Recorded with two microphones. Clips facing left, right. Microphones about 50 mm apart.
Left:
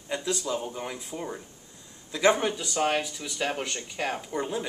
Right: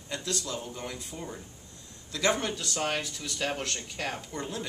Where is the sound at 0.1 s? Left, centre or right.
Centre.